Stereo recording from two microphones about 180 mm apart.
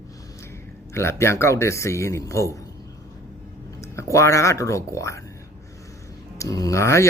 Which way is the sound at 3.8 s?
15° left (ahead or behind).